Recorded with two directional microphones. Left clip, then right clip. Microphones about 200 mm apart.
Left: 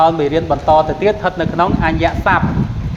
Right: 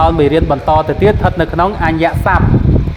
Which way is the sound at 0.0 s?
55° right (ahead or behind).